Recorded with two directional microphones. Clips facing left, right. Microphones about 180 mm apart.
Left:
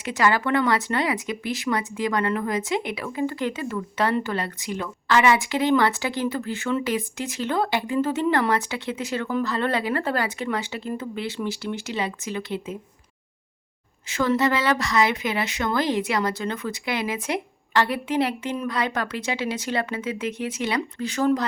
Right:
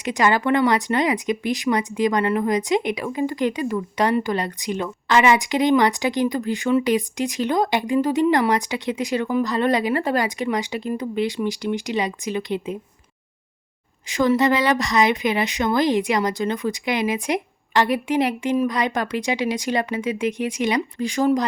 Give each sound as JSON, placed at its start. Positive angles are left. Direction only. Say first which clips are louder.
{"t": 0.0, "sound": "speech", "louder": "right 3 dB", "side_deg": -20}
{"t": 14.1, "sound": "speech", "louder": "right 4 dB", "side_deg": -15}